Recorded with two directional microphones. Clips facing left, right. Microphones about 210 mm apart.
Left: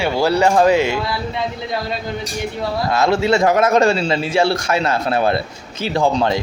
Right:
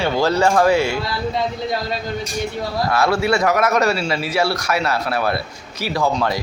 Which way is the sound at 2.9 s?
20° left (ahead or behind).